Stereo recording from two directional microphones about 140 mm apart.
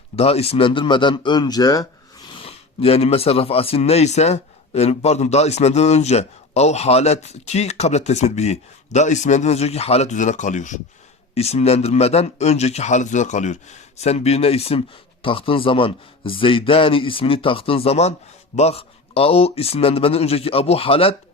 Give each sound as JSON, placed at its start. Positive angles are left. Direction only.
{"t": 0.2, "sound": "a man's voice", "side_deg": 45}
{"t": 2.3, "sound": "speech", "side_deg": 45}
{"t": 11.3, "sound": "speech", "side_deg": 50}